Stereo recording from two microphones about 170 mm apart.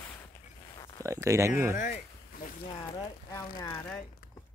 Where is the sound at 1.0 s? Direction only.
15° right (ahead or behind).